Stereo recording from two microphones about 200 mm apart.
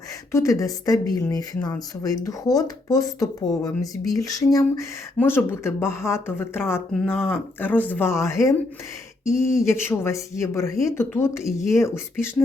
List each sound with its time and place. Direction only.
0.3 s speech: 15° left (ahead or behind)
9.6 s speech: 15° left (ahead or behind)